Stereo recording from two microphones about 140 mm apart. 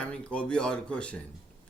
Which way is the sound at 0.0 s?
10° left (ahead or behind).